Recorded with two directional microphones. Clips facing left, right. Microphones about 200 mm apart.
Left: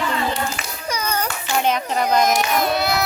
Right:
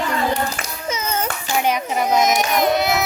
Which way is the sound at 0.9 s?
25° right (ahead or behind).